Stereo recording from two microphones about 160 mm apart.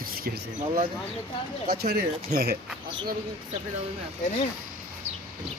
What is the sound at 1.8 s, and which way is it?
Speech, 80° right.